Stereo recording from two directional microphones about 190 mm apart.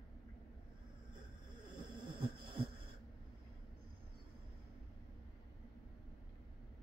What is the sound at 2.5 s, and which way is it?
Heart sounds, 25° right (ahead or behind).